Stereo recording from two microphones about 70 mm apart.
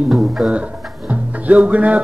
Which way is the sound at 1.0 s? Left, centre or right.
Right.